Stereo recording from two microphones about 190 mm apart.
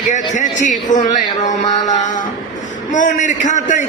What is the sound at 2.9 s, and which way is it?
Speech, 40° left (ahead or behind).